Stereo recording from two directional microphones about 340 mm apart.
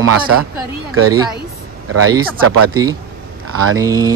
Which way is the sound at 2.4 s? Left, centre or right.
Right.